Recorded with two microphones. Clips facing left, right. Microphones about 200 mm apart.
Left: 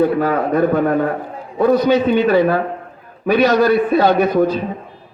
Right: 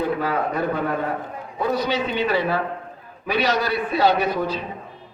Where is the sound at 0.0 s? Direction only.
50° left (ahead or behind).